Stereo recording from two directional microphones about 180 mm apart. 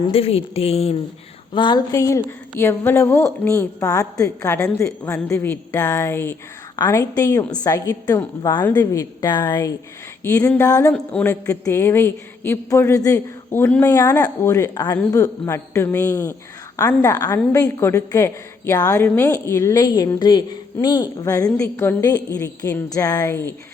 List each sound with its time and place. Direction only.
0.1 s a woman's voice: 35° left (ahead or behind); by 23.6 s 10° left (ahead or behind)